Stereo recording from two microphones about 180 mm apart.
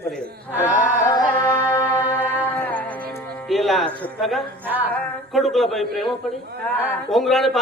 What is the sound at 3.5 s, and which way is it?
A man's voice, centre (ahead or behind).